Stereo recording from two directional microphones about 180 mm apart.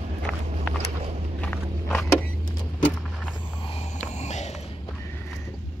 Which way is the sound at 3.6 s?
35° left (ahead or behind).